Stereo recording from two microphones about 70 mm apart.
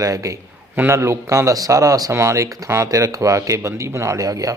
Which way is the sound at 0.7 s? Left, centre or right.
Right.